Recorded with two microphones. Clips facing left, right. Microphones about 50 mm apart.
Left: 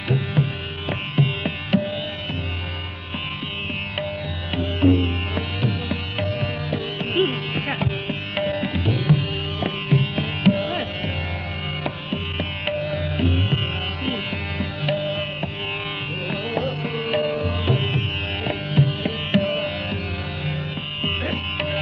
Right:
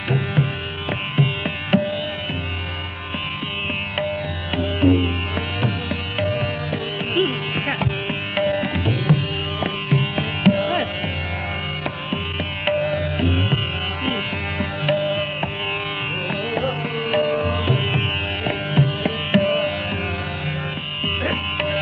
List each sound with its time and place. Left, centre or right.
0.1 s music: centre
1.7 s music: right
4.6 s music: centre
6.3 s music: right
7.2 s music: centre
7.5 s music: right
17.3 s music: right
18.4 s music: centre